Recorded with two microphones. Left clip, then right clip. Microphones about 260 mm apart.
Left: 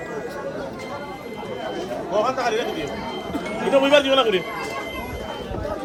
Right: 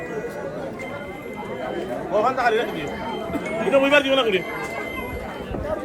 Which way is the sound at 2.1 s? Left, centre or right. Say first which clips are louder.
Right 2 dB; left.